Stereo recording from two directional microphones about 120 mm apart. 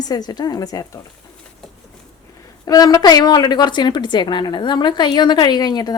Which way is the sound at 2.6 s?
30° left (ahead or behind).